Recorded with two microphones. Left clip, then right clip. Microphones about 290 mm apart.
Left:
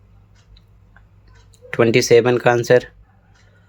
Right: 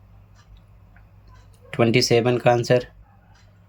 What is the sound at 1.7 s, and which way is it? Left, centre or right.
Speech, centre.